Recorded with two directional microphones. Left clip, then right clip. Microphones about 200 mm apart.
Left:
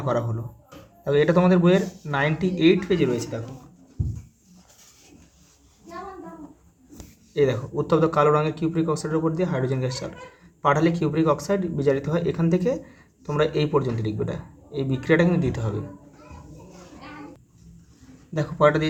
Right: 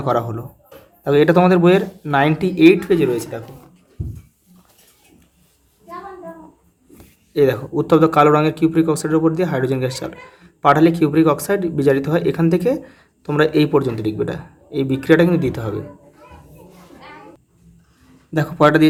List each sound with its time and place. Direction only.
0.0 s speech: 30° right (ahead or behind)
7.3 s speech: 30° right (ahead or behind)
18.3 s speech: 40° right (ahead or behind)